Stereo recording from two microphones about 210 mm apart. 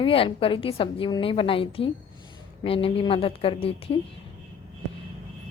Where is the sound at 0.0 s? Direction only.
25° left (ahead or behind).